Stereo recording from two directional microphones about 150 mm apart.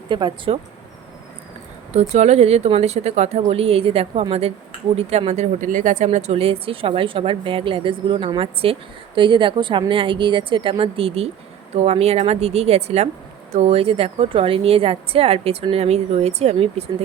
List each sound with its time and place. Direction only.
0.1 s a woman's voice: 30° right (ahead or behind)
1.9 s a woman's voice: 45° right (ahead or behind)